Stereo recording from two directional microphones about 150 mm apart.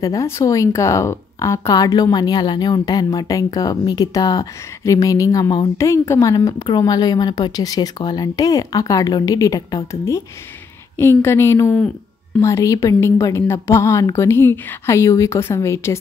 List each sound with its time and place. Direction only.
0.0 s a woman's voice: 20° left (ahead or behind)